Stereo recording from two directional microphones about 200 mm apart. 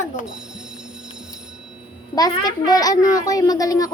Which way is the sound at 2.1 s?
20° left (ahead or behind).